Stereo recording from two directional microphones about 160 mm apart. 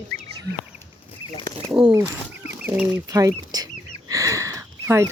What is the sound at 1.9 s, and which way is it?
Speech, 15° right (ahead or behind).